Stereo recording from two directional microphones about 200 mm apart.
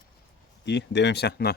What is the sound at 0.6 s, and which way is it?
Speech, 60° left (ahead or behind).